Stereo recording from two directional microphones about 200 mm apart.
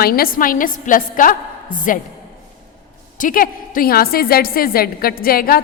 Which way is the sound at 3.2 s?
45° left (ahead or behind).